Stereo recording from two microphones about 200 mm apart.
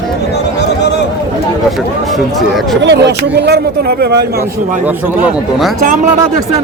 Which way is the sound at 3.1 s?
55° right (ahead or behind).